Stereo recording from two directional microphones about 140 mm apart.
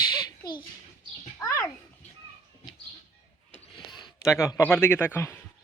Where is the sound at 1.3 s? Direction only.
25° left (ahead or behind).